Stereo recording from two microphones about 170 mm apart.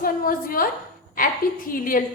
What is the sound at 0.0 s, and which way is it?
Speech, 55° left (ahead or behind).